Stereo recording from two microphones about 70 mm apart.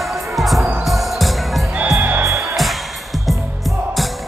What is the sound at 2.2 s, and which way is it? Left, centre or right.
Music, right.